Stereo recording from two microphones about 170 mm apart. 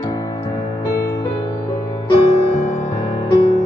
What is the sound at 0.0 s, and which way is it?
Music, 20° left (ahead or behind).